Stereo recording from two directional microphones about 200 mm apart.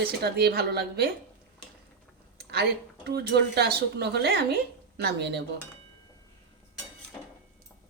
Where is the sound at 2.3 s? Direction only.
55° right (ahead or behind).